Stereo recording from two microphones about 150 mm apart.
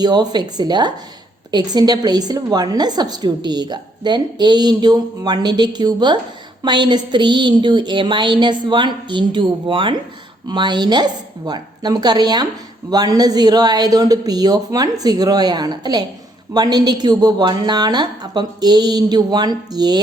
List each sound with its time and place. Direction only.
0.0 s a woman's voice: 30° right (ahead or behind)